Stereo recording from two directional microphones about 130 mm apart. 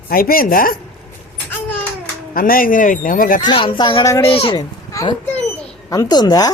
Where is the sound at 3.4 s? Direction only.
35° left (ahead or behind).